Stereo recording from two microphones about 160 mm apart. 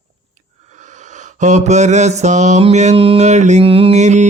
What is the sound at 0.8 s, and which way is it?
Mantra, 50° right (ahead or behind).